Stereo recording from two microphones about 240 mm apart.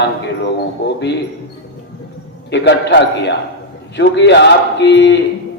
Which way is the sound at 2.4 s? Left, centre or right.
Left.